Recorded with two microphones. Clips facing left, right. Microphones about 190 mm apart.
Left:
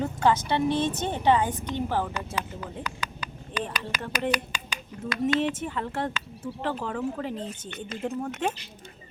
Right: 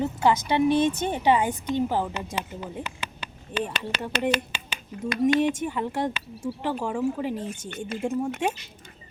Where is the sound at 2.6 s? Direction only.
25° right (ahead or behind).